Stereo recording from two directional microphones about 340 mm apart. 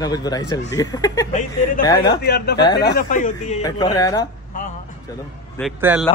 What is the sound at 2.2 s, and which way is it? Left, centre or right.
Speech, left.